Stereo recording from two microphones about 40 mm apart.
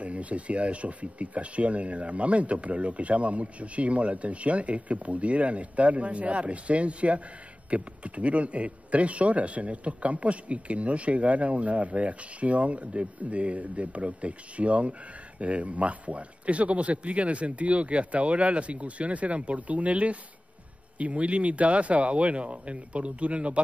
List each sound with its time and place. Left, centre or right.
0.0 s speech: right